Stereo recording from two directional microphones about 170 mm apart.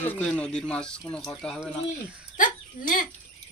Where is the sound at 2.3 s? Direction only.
50° left (ahead or behind).